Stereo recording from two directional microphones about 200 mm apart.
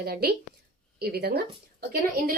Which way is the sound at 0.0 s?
50° right (ahead or behind).